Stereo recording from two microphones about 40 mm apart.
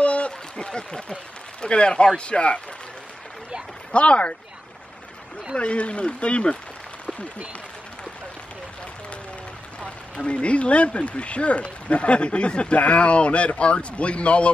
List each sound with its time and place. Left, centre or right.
0.0 s a sound: left
0.7 s a man's voice: left
3.9 s a man's voice: left
5.6 s a man's voice: left
10.2 s speech: left